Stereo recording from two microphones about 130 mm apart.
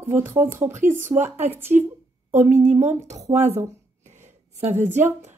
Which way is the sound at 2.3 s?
65° right (ahead or behind).